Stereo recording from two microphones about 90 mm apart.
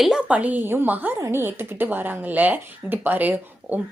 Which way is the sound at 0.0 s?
10° right (ahead or behind).